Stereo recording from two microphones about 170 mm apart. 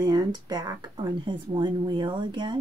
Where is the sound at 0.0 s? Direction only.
25° right (ahead or behind).